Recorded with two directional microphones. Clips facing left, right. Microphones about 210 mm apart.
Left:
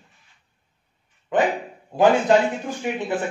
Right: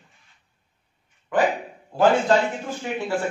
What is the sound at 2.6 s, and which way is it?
Speech, 20° left (ahead or behind).